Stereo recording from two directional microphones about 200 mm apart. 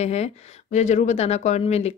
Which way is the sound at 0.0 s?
35° left (ahead or behind).